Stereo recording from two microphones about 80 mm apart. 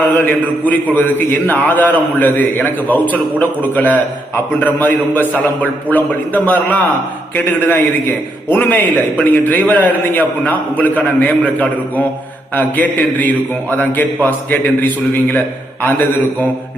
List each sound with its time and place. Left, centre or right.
0.1 s a man's voice: left